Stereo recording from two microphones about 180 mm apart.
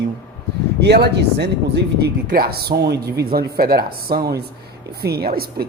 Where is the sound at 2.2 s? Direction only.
55° right (ahead or behind).